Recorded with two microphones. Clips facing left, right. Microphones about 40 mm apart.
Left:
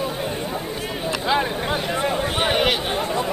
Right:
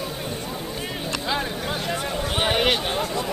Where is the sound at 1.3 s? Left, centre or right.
Centre.